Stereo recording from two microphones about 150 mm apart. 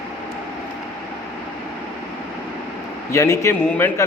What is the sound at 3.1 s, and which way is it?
Speech, 20° left (ahead or behind).